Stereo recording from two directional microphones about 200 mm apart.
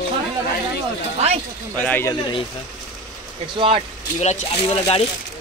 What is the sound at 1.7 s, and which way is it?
Speech, 10° left (ahead or behind).